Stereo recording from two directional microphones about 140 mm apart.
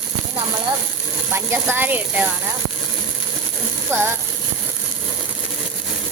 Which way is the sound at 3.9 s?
20° right (ahead or behind).